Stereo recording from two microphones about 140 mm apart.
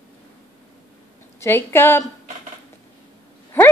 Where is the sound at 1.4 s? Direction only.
15° left (ahead or behind).